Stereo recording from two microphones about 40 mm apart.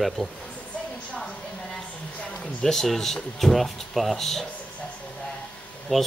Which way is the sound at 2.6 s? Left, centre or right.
Centre.